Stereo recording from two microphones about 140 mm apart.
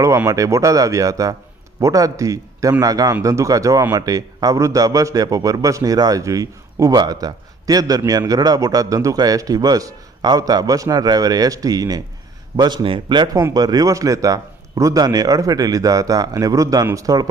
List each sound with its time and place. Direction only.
0.0 s speech: 20° right (ahead or behind)